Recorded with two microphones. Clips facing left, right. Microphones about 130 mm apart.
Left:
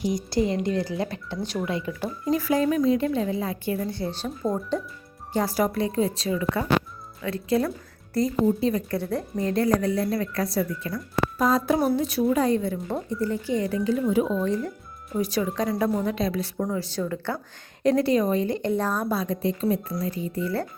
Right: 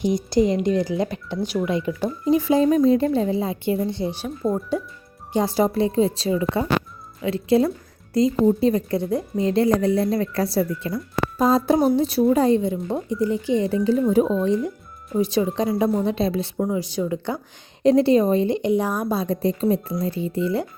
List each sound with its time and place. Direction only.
0.0 s a woman's voice: 25° right (ahead or behind); by 4.8 s 5° right (ahead or behind)
5.3 s a woman's voice: 20° right (ahead or behind)
9.5 s a woman's voice: 25° right (ahead or behind)
14.3 s a woman's voice: 20° right (ahead or behind)
16.6 s a woman's voice: 15° right (ahead or behind)
19.1 s a woman's voice: 30° right (ahead or behind)